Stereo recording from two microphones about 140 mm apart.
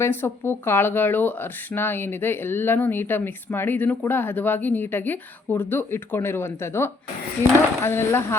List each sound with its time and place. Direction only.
0.0 s speech: 15° left (ahead or behind)